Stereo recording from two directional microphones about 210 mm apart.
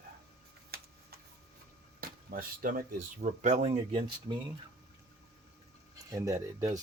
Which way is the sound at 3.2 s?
35° right (ahead or behind).